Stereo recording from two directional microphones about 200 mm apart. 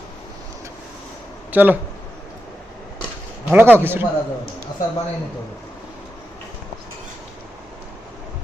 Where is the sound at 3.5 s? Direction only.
10° right (ahead or behind).